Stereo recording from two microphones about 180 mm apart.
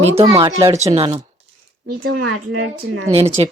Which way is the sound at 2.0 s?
55° right (ahead or behind).